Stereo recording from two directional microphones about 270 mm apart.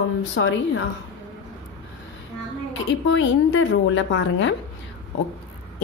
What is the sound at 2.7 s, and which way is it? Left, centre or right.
A woman's voice, left.